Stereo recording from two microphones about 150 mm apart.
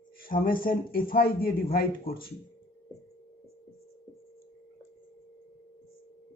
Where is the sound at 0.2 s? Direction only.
70° left (ahead or behind).